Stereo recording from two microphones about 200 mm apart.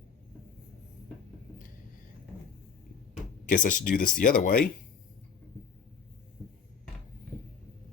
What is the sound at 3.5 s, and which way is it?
Speech, 45° left (ahead or behind).